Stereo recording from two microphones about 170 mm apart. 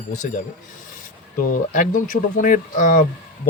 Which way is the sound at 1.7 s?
50° left (ahead or behind).